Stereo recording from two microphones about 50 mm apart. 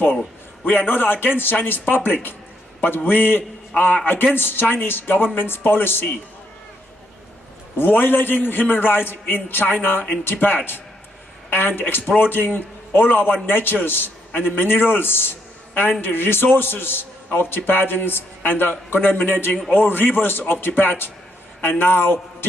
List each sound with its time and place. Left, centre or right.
0.7 s a man's voice: left
7.7 s a man's voice: left